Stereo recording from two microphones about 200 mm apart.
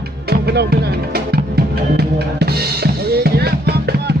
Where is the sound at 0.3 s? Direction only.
50° right (ahead or behind).